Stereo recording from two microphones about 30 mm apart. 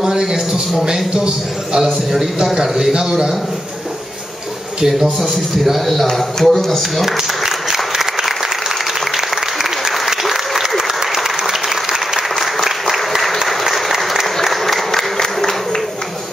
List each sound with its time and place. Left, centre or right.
0.0 s a man's voice: centre
1.1 s a man's voice: right
2.4 s a man's voice: centre
5.6 s speech: centre
7.1 s applause: centre
14.4 s applause: centre
14.9 s a sound: centre